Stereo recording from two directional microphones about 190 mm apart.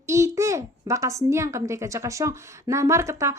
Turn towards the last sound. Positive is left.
turn(degrees=-15)  # may be behind; listen again after turning